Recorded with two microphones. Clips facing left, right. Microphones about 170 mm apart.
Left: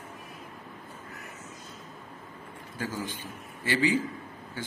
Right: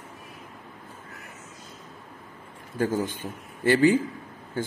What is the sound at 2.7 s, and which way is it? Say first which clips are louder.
A man's voice: right 9 dB; 55° right (ahead or behind).